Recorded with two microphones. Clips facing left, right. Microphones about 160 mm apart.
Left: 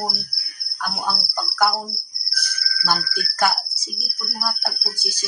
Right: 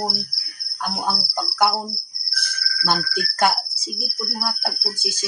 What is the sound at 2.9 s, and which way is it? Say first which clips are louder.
Speech: right 2 dB; 20° right (ahead or behind).